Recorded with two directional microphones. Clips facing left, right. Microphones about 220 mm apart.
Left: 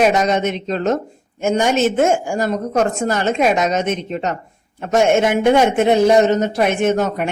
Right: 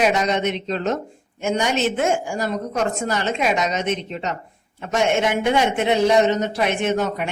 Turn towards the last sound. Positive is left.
turn(degrees=45)  # may be behind; listen again after turning